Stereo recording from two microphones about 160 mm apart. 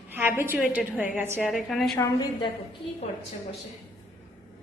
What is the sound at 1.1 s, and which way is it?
Speech, 15° right (ahead or behind).